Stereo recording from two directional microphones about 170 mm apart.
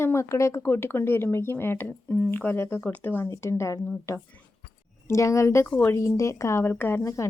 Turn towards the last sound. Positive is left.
turn(degrees=20)  # may be behind; listen again after turning